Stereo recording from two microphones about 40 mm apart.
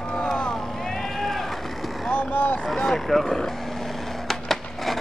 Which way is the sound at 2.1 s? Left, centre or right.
Left.